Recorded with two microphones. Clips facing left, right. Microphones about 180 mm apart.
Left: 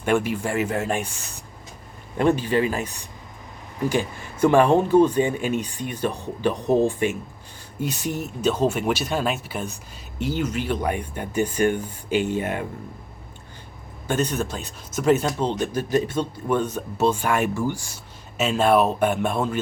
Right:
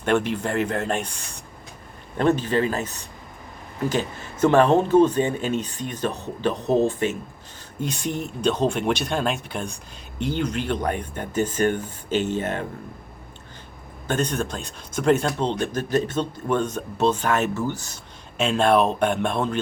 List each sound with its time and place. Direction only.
0.0 s speech: 10° left (ahead or behind)
14.1 s speech: 5° left (ahead or behind)